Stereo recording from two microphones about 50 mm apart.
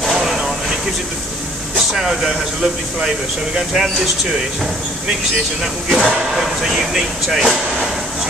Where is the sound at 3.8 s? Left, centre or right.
Centre.